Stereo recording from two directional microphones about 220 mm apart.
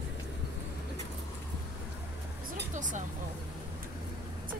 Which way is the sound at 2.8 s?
35° right (ahead or behind).